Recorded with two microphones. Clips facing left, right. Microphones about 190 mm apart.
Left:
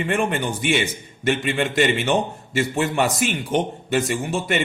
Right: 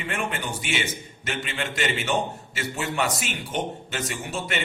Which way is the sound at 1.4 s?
50° left (ahead or behind).